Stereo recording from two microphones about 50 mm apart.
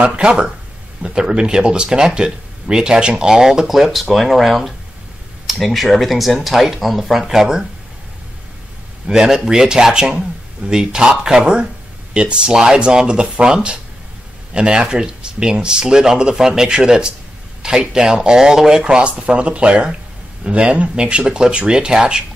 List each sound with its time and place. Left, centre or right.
0.0 s speech: right
9.0 s speech: centre